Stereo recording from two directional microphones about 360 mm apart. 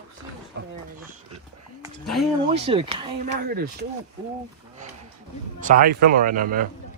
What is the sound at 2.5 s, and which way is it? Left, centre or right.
Speech, centre.